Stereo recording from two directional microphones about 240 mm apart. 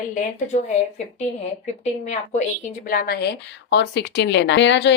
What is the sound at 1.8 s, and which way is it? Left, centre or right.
Speech, left.